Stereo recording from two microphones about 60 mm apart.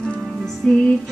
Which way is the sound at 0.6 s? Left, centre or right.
Centre.